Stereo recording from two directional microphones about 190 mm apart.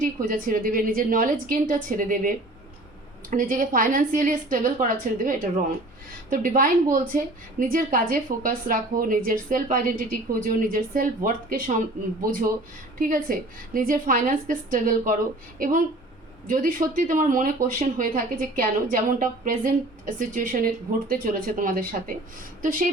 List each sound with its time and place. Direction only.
0.0 s speech: 45° right (ahead or behind)
6.3 s speech: 45° right (ahead or behind)